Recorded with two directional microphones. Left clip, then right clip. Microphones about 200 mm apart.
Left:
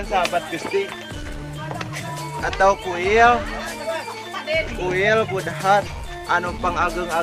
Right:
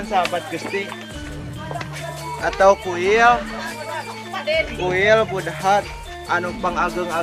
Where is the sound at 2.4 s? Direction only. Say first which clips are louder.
Right 3 dB; 25° right (ahead or behind).